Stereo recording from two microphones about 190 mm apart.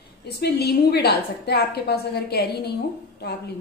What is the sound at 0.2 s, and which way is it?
A woman's voice, 55° left (ahead or behind).